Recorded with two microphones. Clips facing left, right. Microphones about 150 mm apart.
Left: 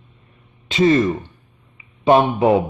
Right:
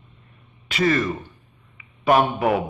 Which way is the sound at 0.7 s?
20° left (ahead or behind).